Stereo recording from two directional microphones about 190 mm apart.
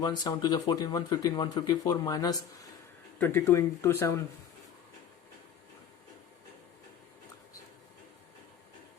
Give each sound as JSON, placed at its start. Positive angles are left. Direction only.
{"t": 0.0, "sound": "speech", "side_deg": 20}